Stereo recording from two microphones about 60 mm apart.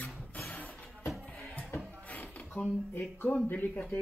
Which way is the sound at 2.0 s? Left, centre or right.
Left.